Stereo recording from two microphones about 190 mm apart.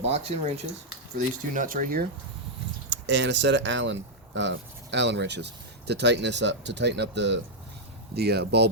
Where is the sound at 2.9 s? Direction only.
65° right (ahead or behind).